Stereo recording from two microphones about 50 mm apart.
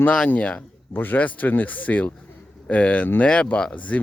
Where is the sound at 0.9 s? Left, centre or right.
Left.